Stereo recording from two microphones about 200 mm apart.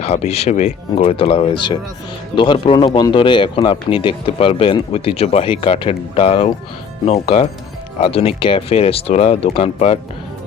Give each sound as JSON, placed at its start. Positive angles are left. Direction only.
{"t": 0.0, "sound": "speech", "side_deg": 30}